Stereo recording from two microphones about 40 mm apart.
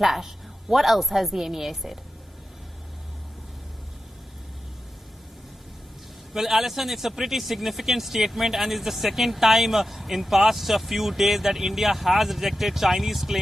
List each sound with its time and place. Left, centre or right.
0.0 s a man's voice: centre
6.3 s a man's voice: centre